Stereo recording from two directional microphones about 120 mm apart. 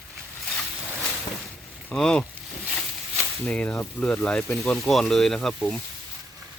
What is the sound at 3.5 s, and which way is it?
Speech, 10° left (ahead or behind).